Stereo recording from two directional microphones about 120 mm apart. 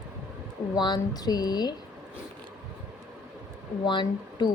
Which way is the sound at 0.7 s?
35° left (ahead or behind).